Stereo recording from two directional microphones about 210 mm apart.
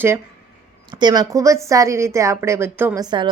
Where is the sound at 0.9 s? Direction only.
20° right (ahead or behind).